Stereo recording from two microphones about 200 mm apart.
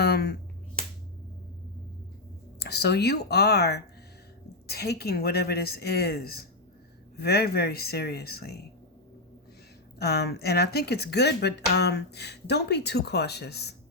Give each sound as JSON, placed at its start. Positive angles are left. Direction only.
{"t": 0.0, "sound": "finger snapping", "side_deg": 55}
{"t": 2.6, "sound": "speech", "side_deg": 55}
{"t": 10.0, "sound": "speech", "side_deg": 55}